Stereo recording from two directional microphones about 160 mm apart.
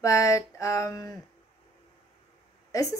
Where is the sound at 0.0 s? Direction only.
20° left (ahead or behind).